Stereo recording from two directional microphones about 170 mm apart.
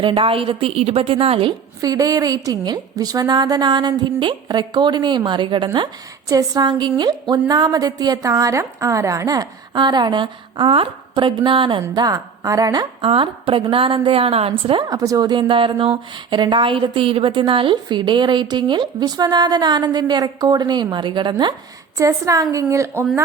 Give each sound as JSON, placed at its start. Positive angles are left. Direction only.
{"t": 0.0, "sound": "a woman's voice", "side_deg": -30}